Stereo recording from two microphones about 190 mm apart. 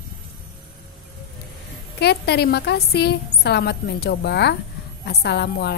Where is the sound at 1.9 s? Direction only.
60° left (ahead or behind).